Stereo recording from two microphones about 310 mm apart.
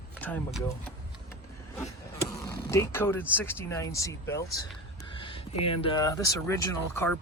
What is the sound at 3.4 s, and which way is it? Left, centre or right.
Speech, centre.